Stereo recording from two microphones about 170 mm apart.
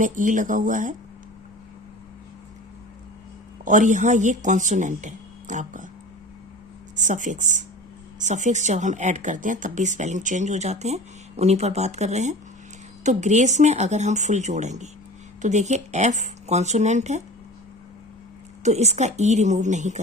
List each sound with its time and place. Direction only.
0.0 s speech: 50° right (ahead or behind)
3.6 s speech: 45° right (ahead or behind)
6.9 s speech: 45° right (ahead or behind)
18.6 s speech: 40° right (ahead or behind)